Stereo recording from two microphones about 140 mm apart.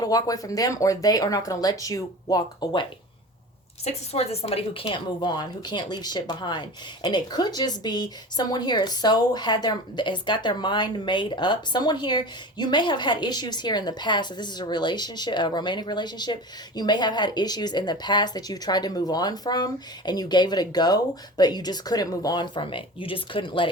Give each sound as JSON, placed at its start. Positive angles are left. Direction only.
{"t": 0.0, "sound": "speech", "side_deg": 25}
{"t": 3.8, "sound": "a woman's voice", "side_deg": 50}